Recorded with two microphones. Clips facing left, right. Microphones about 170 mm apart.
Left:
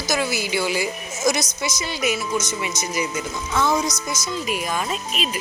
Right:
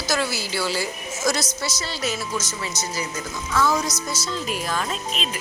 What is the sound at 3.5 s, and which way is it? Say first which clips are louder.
Music: even; 20° left (ahead or behind).